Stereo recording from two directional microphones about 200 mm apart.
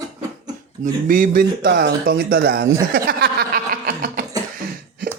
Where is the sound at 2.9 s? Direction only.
50° right (ahead or behind).